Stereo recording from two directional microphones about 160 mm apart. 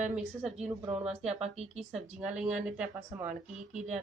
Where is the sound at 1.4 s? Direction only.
45° right (ahead or behind).